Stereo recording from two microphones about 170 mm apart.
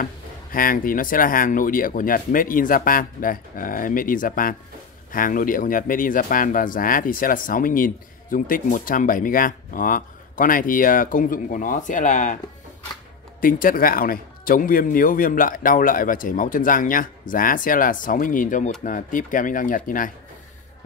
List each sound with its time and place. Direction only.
0.0 s speech: 55° left (ahead or behind)
13.4 s speech: 55° left (ahead or behind)